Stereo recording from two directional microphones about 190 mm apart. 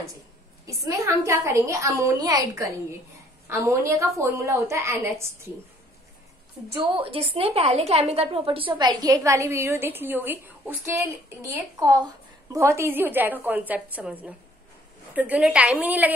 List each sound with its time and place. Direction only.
0.7 s a woman's voice: 15° right (ahead or behind)
7.0 s a woman's voice: 30° right (ahead or behind); by 16.1 s 10° right (ahead or behind)